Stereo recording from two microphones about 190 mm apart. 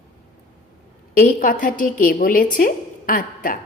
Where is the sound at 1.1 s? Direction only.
45° left (ahead or behind).